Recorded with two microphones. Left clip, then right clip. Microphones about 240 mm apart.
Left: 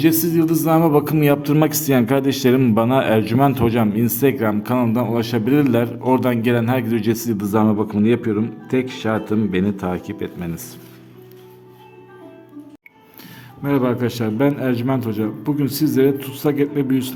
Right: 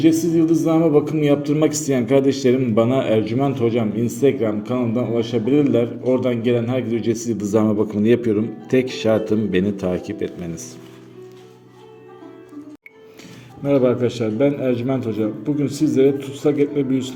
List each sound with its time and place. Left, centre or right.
0.0 s a man's voice: left; by 10.6 s centre
13.7 s a man's voice: left